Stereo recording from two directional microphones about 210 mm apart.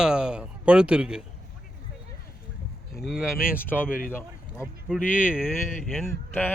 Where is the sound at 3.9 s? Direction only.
40° left (ahead or behind).